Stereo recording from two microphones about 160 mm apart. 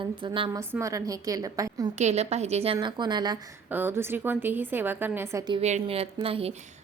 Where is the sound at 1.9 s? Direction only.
45° right (ahead or behind); by 3.4 s 25° right (ahead or behind).